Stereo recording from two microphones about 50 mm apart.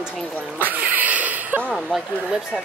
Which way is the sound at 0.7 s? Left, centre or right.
Right.